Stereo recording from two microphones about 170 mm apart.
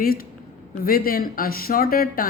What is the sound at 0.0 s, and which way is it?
Speech, 60° left (ahead or behind).